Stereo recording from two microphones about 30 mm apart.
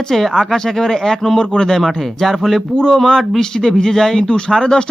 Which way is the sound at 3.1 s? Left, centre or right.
Centre.